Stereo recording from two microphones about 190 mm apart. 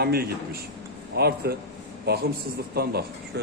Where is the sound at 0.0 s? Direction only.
55° right (ahead or behind).